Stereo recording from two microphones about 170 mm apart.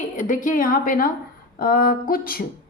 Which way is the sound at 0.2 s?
50° left (ahead or behind).